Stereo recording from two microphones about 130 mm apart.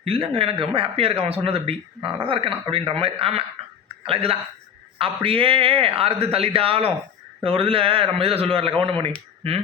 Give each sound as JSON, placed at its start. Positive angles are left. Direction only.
{"t": 0.0, "sound": "speech", "side_deg": -45}